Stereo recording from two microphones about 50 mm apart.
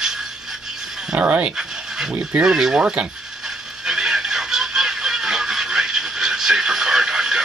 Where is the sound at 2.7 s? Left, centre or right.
Right.